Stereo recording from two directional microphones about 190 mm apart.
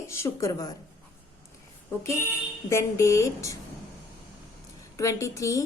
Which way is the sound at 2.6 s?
15° left (ahead or behind).